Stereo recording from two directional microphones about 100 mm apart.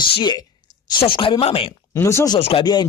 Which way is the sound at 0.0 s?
45° left (ahead or behind).